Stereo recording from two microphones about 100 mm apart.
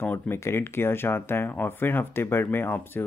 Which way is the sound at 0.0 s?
25° left (ahead or behind).